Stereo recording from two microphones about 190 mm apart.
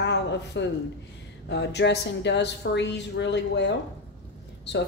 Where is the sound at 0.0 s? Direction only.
65° left (ahead or behind).